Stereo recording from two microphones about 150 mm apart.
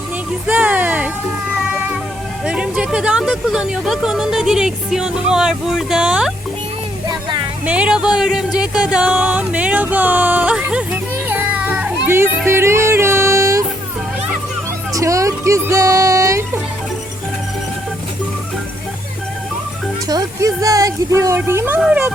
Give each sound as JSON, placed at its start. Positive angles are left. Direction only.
{"t": 0.4, "sound": "a sound", "side_deg": -10}
{"t": 2.4, "sound": "speech", "side_deg": -5}
{"t": 7.1, "sound": "music", "side_deg": -30}
{"t": 7.6, "sound": "speech", "side_deg": -10}
{"t": 12.5, "sound": "music", "side_deg": -15}
{"t": 14.9, "sound": "music", "side_deg": -20}
{"t": 20.1, "sound": "speech", "side_deg": -25}